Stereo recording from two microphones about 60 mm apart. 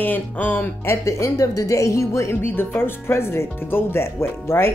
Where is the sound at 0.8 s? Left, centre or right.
Left.